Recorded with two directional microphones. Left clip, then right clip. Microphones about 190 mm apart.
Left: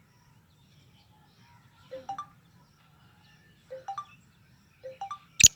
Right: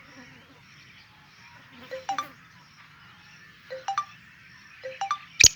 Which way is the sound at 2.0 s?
25° left (ahead or behind).